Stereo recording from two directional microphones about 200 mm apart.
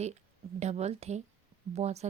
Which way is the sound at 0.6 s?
35° right (ahead or behind).